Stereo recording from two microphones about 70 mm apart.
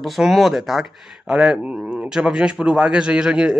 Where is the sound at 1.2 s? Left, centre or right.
Centre.